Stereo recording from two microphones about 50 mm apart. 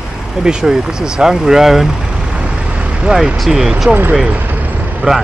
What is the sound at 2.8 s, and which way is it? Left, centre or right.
Vehicle, right.